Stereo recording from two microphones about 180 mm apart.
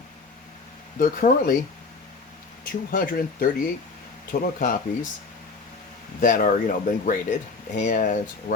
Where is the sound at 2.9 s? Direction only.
50° left (ahead or behind).